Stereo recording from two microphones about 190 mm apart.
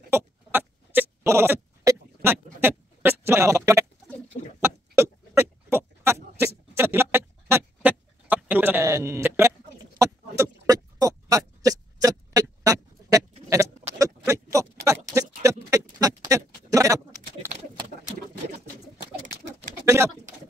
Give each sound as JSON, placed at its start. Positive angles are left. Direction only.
{"t": 0.1, "sound": "owl", "side_deg": -10}
{"t": 4.6, "sound": "rodents", "side_deg": -15}
{"t": 6.8, "sound": "a sound", "side_deg": -10}
{"t": 13.5, "sound": "owl", "side_deg": -15}